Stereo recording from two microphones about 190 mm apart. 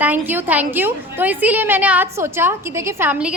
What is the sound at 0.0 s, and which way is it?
A woman's voice, 10° right (ahead or behind).